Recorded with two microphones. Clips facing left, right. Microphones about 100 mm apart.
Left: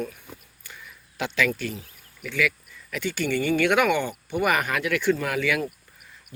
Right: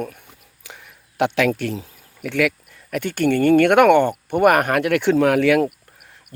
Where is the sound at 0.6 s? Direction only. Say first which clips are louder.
Right 3 dB; 80° right.